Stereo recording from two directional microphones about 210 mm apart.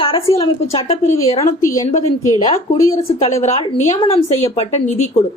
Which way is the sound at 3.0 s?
30° left (ahead or behind).